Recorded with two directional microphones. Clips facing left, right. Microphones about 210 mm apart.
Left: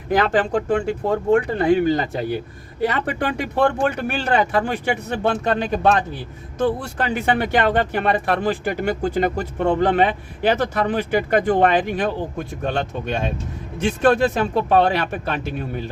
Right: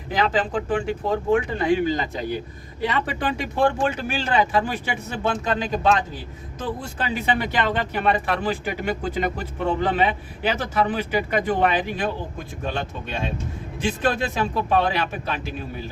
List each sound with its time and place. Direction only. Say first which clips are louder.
0.1 s speech: left 4 dB; 50° left (ahead or behind)